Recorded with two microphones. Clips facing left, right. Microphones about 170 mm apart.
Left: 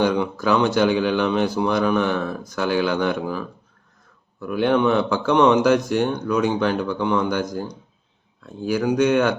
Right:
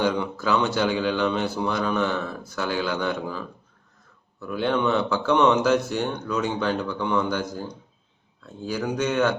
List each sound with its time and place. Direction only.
0.0 s speech: 15° left (ahead or behind)
8.6 s speech: 15° left (ahead or behind)